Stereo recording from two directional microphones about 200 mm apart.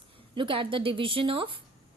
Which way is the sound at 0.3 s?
25° right (ahead or behind).